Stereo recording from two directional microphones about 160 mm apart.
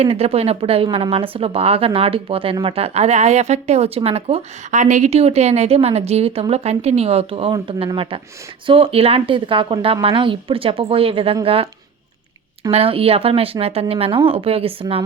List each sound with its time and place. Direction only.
0.0 s a woman's voice: 40° right (ahead or behind)
12.7 s a woman's voice: 35° right (ahead or behind)